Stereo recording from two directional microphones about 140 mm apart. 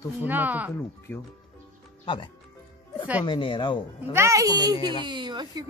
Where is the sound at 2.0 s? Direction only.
35° left (ahead or behind).